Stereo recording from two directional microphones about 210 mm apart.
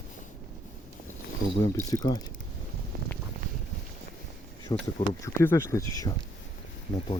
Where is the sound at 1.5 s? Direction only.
15° left (ahead or behind).